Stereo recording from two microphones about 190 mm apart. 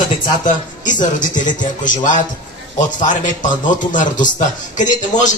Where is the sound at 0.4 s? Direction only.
40° left (ahead or behind).